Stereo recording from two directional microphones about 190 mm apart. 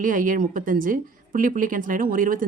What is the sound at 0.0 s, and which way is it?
A woman's voice, 45° right (ahead or behind).